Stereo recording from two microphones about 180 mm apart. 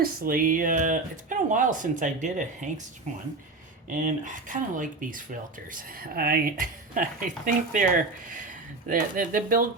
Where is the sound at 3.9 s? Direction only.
45° right (ahead or behind).